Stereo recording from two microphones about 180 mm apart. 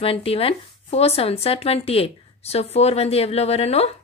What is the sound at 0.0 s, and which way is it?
Speech, 30° left (ahead or behind).